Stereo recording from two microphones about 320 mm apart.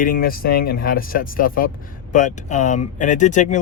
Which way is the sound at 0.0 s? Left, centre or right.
Left.